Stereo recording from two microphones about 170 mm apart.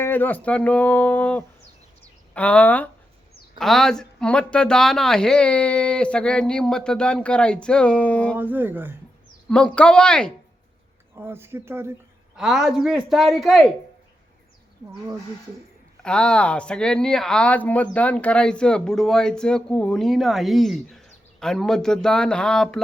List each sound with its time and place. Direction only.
0.0 s speech: 10° left (ahead or behind)
8.4 s speech: 10° right (ahead or behind)
9.5 s speech: 5° left (ahead or behind)
11.1 s speech: 15° right (ahead or behind)
12.4 s speech: centre (ahead or behind)
16.0 s speech: 5° left (ahead or behind)